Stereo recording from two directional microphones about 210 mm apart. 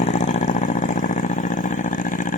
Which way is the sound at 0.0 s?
35° left (ahead or behind).